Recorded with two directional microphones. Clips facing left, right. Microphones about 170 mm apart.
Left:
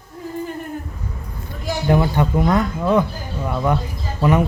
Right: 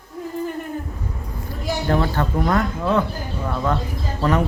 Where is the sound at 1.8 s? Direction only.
15° left (ahead or behind).